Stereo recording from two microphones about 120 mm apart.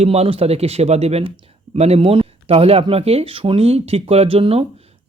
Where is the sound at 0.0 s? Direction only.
55° right (ahead or behind).